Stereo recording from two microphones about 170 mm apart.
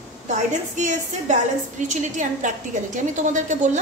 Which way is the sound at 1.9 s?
45° right (ahead or behind).